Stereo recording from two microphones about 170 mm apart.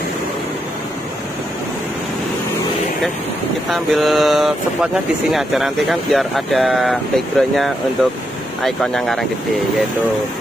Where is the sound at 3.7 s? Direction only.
Centre (ahead or behind).